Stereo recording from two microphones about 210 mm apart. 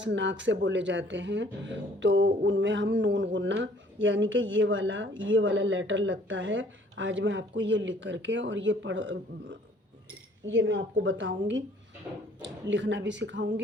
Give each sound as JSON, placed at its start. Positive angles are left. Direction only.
{"t": 0.0, "sound": "speech", "side_deg": -60}